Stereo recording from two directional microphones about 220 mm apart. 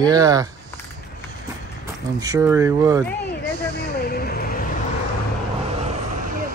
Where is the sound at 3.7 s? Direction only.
45° left (ahead or behind).